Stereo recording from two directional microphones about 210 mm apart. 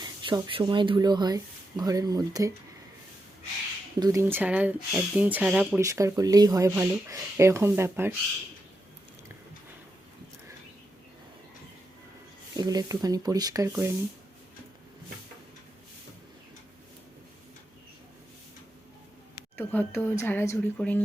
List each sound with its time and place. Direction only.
0.0 s speech: 20° right (ahead or behind)
4.0 s speech: 15° right (ahead or behind)
12.5 s speech: 20° right (ahead or behind)
19.4 s speech: 10° left (ahead or behind)